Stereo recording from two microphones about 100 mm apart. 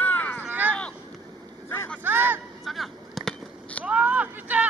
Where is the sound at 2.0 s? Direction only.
20° right (ahead or behind).